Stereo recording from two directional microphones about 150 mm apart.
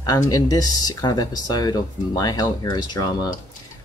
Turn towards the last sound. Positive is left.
turn(degrees=25)  # may be behind; listen again after turning